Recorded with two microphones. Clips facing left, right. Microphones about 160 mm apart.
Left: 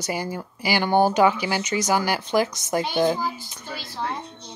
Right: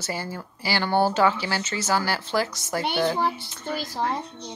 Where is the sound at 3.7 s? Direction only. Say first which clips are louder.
Right 3 dB; 40° right (ahead or behind).